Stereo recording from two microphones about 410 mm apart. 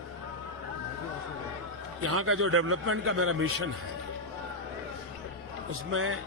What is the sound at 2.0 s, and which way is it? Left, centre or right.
A man's voice, right.